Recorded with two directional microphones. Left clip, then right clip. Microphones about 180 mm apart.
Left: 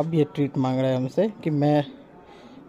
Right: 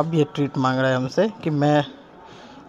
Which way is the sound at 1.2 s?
10° left (ahead or behind).